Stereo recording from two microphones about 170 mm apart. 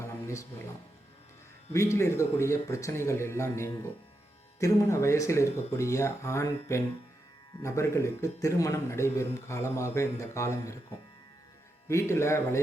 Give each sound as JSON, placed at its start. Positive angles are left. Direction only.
{"t": 0.0, "sound": "music", "side_deg": 15}
{"t": 1.7, "sound": "a man's voice", "side_deg": 15}
{"t": 11.9, "sound": "a man's voice", "side_deg": 15}